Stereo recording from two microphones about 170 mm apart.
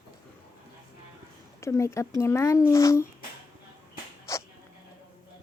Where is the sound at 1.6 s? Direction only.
15° left (ahead or behind).